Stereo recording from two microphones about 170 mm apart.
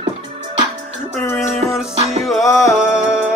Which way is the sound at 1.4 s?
Centre (ahead or behind).